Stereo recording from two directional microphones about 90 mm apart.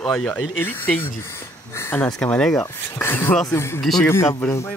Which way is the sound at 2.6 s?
25° left (ahead or behind).